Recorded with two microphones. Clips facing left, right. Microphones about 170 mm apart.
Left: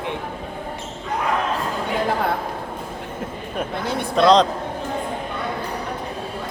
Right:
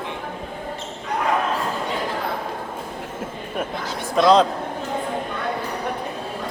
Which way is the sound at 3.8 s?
60° left (ahead or behind).